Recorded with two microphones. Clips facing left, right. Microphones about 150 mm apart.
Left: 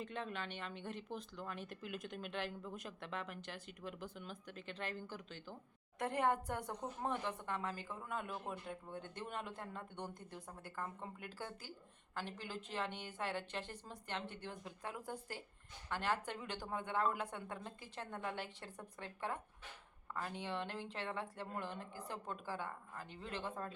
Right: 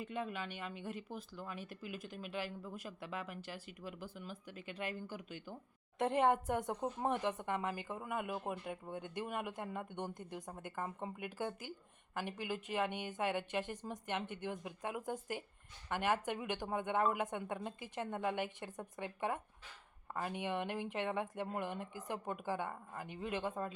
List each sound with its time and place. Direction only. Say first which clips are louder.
0.0 s a woman's voice: right 3 dB; 10° right (ahead or behind)